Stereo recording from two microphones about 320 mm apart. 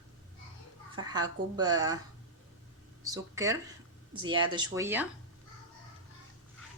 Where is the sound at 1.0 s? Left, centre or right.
Centre.